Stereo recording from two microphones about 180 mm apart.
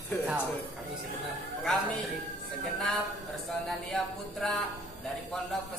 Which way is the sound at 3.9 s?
5° left (ahead or behind).